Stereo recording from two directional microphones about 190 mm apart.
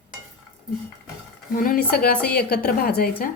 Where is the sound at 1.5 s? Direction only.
50° left (ahead or behind).